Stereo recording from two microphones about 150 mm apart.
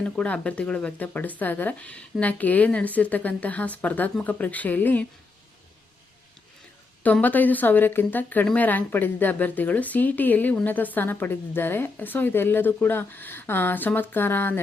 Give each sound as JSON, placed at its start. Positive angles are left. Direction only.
{"t": 0.0, "sound": "a woman's voice", "side_deg": 5}
{"t": 7.0, "sound": "a woman's voice", "side_deg": 10}